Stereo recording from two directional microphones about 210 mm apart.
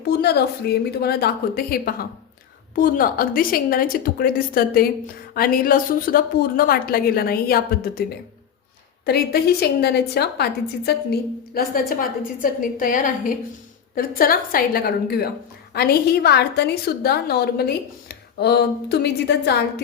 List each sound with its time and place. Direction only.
0.0 s a woman's voice: 50° left (ahead or behind)
9.0 s a woman's voice: 50° left (ahead or behind)